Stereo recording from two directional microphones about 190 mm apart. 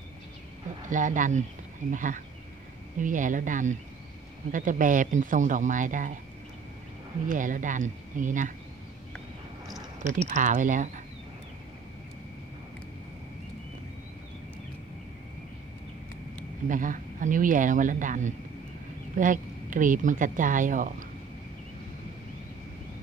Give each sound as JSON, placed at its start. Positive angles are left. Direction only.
{"t": 0.8, "sound": "speech", "side_deg": -40}
{"t": 7.2, "sound": "speech", "side_deg": -45}
{"t": 10.0, "sound": "speech", "side_deg": -40}
{"t": 16.6, "sound": "speech", "side_deg": -45}